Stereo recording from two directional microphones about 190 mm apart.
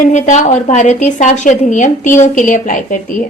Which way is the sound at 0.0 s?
40° left (ahead or behind).